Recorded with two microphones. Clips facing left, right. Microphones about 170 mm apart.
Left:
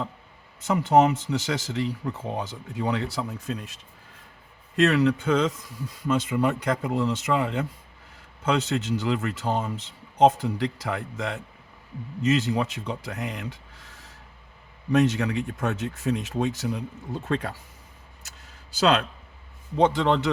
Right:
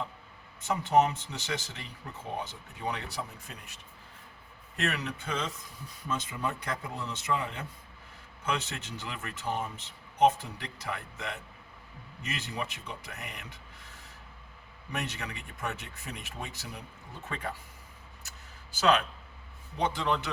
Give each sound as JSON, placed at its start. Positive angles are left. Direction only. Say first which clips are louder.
{"t": 0.6, "sound": "speech", "louder": "left 6 dB", "side_deg": 90}
{"t": 4.8, "sound": "speech", "louder": "left 13 dB", "side_deg": 90}
{"t": 14.9, "sound": "speech", "louder": "left 16 dB", "side_deg": 90}
{"t": 19.7, "sound": "speech", "louder": "left 9 dB", "side_deg": 90}